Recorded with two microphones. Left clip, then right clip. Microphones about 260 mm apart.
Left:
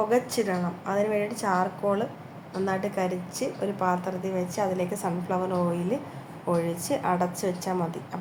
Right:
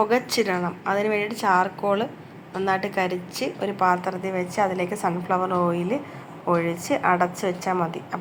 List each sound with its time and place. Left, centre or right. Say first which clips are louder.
0.1 s a woman's voice: right 3 dB; centre